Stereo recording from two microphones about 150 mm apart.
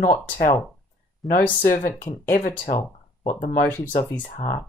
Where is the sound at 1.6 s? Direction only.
65° left (ahead or behind).